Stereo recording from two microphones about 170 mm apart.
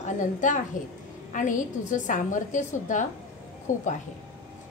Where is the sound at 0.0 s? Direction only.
45° left (ahead or behind).